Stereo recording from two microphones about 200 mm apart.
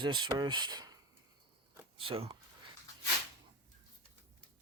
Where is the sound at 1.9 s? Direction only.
25° right (ahead or behind).